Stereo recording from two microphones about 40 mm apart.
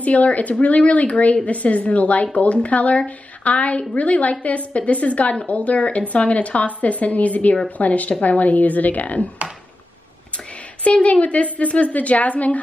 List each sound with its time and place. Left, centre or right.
0.0 s a woman's voice: left
10.8 s a woman's voice: left